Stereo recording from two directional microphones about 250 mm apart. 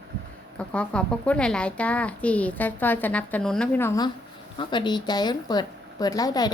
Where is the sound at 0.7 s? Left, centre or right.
Centre.